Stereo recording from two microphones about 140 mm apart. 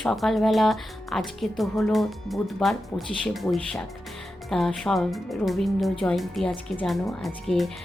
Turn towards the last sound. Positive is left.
turn(degrees=0)  # may be behind; listen again after turning